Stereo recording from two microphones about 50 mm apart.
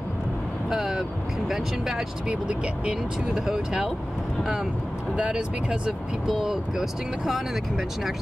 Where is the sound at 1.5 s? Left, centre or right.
Centre.